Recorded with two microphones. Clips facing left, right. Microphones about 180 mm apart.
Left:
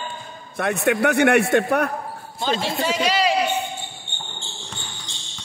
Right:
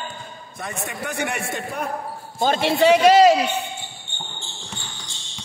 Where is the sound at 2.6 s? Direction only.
65° right (ahead or behind); by 3.4 s 45° right (ahead or behind).